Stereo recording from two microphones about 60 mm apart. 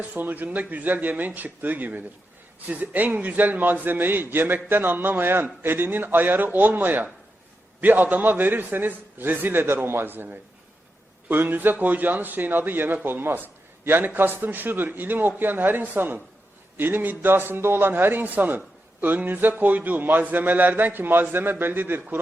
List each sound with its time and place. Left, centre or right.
0.0 s a man's voice: right